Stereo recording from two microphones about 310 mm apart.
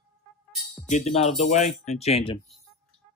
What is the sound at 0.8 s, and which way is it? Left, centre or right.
Speech, left.